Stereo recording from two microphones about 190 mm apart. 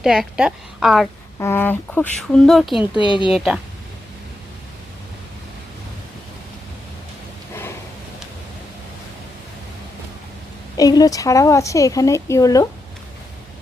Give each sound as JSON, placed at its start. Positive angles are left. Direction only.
{"t": 0.0, "sound": "a woman's voice", "side_deg": -5}
{"t": 1.4, "sound": "speech", "side_deg": 10}
{"t": 3.0, "sound": "speech", "side_deg": 25}
{"t": 3.3, "sound": "a woman's voice", "side_deg": -5}
{"t": 10.8, "sound": "speech", "side_deg": 20}